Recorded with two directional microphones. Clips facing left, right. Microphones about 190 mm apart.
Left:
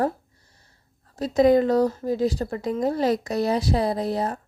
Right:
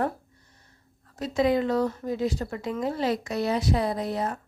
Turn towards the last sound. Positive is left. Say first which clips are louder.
# left 3 dB
turn(degrees=35)  # may be behind; listen again after turning